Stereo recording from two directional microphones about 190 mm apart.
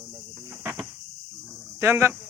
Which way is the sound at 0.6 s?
5° right (ahead or behind).